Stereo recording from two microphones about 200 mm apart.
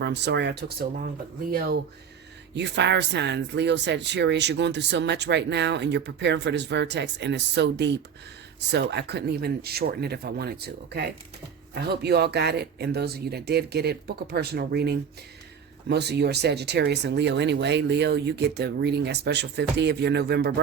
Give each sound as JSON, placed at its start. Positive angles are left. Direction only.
{"t": 0.0, "sound": "speech", "side_deg": -60}
{"t": 2.6, "sound": "speech", "side_deg": -60}